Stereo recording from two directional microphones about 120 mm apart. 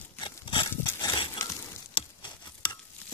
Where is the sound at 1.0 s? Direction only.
45° left (ahead or behind).